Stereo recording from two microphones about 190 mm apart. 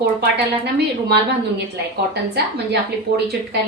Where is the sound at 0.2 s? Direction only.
60° right (ahead or behind).